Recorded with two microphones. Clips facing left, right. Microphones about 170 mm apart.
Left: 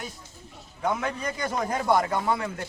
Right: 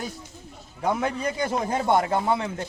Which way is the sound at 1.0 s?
30° right (ahead or behind).